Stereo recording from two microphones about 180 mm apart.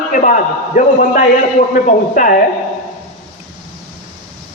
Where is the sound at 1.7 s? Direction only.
45° left (ahead or behind).